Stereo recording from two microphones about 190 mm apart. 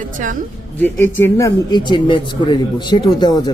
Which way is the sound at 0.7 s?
10° left (ahead or behind).